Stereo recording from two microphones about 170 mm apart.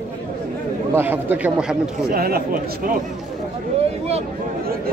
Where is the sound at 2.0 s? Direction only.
65° right (ahead or behind).